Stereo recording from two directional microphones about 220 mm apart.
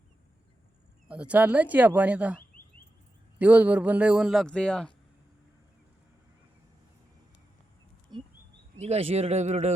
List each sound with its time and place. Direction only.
1.0 s a man's voice: 5° right (ahead or behind)
8.1 s bird: 20° right (ahead or behind)
8.8 s speech: 30° right (ahead or behind)